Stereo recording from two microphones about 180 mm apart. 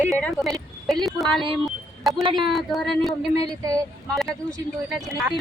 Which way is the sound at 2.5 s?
Centre (ahead or behind).